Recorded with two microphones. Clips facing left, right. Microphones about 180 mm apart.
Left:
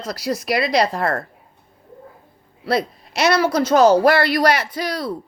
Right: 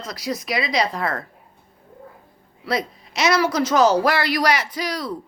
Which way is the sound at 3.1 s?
60° left (ahead or behind).